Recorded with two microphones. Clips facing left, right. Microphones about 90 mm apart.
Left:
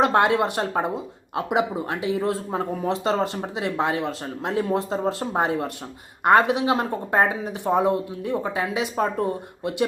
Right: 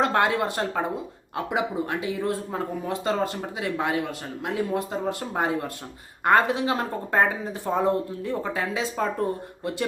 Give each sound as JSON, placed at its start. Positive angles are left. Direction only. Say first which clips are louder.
{"t": 0.0, "sound": "speech", "louder": "left 3 dB", "side_deg": 20}